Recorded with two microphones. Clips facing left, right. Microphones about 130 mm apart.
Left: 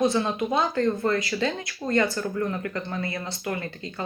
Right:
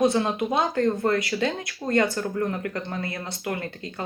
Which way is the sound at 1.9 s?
50° right (ahead or behind).